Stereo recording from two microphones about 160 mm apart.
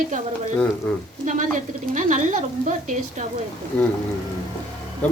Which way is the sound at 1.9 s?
50° right (ahead or behind).